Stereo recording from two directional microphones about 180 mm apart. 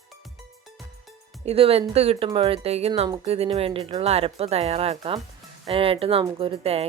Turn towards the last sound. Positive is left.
turn(degrees=-35)  # may be behind; listen again after turning